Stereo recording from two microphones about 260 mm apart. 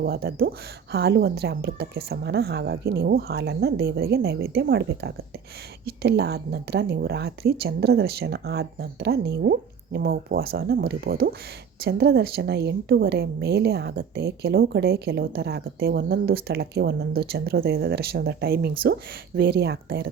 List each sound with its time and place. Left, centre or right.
0.0 s a woman's voice: right